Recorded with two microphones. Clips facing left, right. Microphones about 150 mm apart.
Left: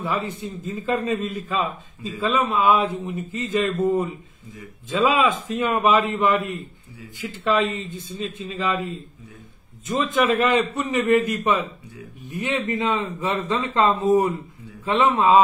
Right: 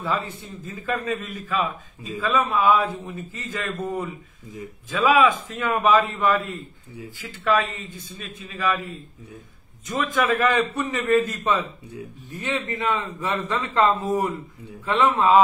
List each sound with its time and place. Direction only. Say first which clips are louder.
0.0 s a man's voice: left 1 dB; 20° left (ahead or behind)